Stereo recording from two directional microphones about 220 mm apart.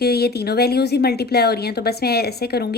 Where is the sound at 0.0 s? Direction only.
45° left (ahead or behind).